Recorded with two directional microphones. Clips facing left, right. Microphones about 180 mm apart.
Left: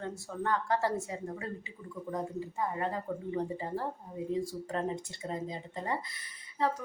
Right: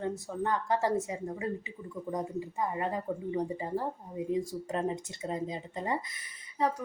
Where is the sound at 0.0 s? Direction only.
15° right (ahead or behind).